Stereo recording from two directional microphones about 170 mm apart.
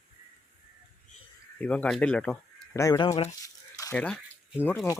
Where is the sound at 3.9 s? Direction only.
5° left (ahead or behind).